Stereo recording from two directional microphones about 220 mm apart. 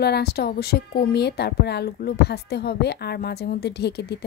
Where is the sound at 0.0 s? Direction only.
45° left (ahead or behind).